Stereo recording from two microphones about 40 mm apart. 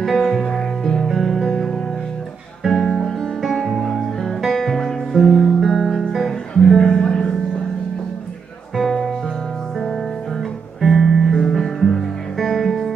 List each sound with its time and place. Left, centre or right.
0.0 s music: centre
2.6 s music: centre
6.8 s music: centre
10.8 s music: centre